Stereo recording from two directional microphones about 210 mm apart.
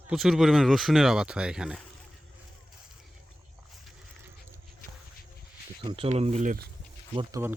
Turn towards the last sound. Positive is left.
turn(degrees=-15)  # may be behind; listen again after turning